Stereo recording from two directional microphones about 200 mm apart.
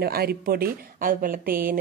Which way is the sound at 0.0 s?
50° right (ahead or behind).